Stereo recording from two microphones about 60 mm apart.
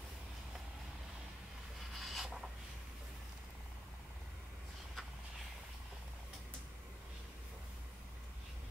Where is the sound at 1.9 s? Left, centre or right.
Centre.